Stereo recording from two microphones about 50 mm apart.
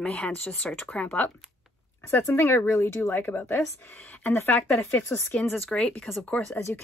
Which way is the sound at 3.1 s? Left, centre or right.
Left.